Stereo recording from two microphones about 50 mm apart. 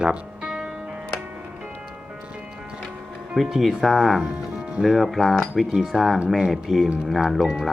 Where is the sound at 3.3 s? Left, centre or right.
Centre.